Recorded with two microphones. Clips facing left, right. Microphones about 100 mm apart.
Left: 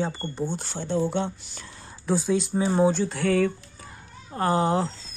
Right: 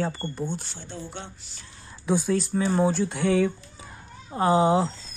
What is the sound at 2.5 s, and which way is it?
Speech, 25° left (ahead or behind).